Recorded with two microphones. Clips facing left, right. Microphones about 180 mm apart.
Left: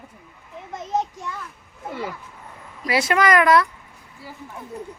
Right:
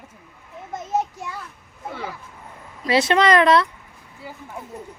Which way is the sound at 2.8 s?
25° right (ahead or behind).